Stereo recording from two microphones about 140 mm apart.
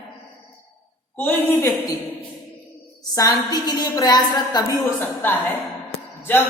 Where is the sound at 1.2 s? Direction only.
15° left (ahead or behind).